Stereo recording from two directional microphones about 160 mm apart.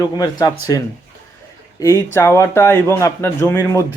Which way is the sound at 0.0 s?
25° left (ahead or behind).